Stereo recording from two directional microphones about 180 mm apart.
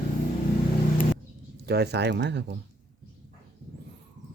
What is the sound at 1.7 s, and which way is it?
Speech, 65° right (ahead or behind).